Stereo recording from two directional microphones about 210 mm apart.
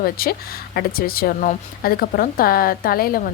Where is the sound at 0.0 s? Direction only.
45° left (ahead or behind).